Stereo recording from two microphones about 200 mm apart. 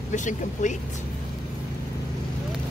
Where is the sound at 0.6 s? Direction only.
40° left (ahead or behind).